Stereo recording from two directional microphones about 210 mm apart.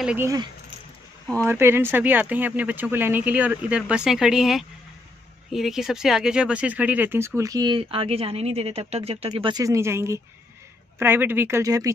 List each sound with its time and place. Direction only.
0.0 s speech: 5° right (ahead or behind)
1.4 s speech: 10° right (ahead or behind)